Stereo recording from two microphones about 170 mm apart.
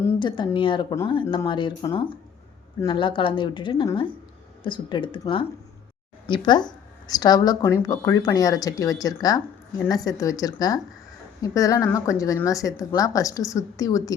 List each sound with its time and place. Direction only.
0.2 s speech: 30° left (ahead or behind)